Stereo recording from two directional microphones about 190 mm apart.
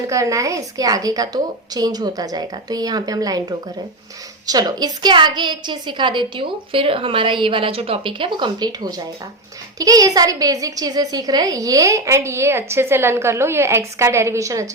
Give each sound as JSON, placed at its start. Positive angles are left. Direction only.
{"t": 0.1, "sound": "a woman's voice", "side_deg": -15}